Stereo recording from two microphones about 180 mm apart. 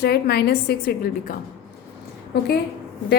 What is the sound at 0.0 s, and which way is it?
A woman's voice, 65° left (ahead or behind).